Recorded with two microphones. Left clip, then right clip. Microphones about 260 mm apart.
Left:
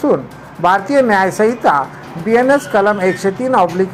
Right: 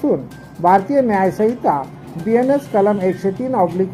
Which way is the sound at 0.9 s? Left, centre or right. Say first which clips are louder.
Left 4 dB; left.